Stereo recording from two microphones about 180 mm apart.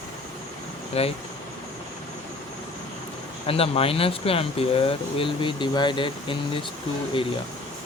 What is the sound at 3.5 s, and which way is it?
Speech, 30° left (ahead or behind).